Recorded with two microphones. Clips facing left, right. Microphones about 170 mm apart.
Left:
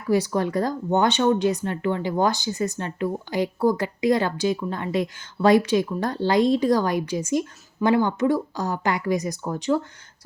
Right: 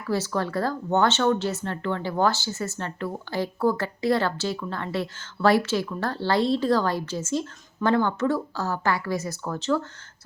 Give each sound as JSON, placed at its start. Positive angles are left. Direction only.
{"t": 0.1, "sound": "speech", "side_deg": 15}